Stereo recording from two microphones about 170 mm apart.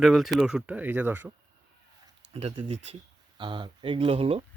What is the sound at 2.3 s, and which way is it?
Speech, 35° right (ahead or behind).